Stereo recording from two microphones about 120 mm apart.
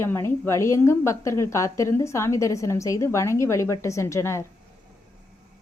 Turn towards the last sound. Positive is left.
turn(degrees=25)  # may be behind; listen again after turning